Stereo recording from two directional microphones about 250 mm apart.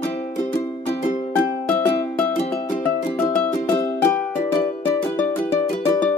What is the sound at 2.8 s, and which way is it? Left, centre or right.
Music, centre.